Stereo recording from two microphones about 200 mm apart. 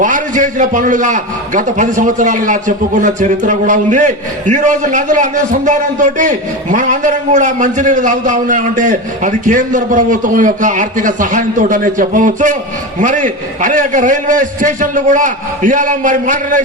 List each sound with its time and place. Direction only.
0.0 s a man's voice: 40° right (ahead or behind)